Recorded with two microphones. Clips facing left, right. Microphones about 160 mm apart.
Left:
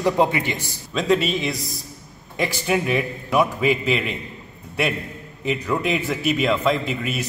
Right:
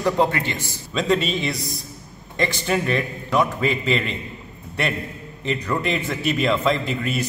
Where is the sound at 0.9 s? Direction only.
Centre (ahead or behind).